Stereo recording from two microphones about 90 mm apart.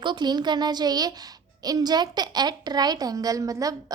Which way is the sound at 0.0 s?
55° right (ahead or behind).